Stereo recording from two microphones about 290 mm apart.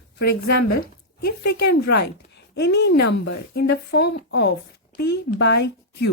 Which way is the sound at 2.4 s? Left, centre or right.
Left.